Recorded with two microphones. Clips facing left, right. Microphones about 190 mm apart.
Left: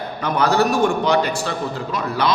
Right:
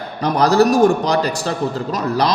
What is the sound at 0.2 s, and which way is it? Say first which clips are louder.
A man's voice: right 4 dB; 35° right (ahead or behind).